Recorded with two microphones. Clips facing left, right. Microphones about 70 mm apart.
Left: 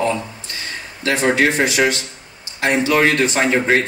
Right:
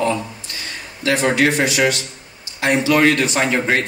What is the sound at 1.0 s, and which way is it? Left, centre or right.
Speech, left.